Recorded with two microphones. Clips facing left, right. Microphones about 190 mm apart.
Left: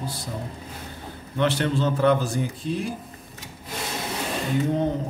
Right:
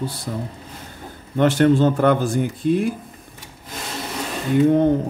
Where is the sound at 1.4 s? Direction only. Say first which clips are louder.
Right 8 dB; 50° right (ahead or behind).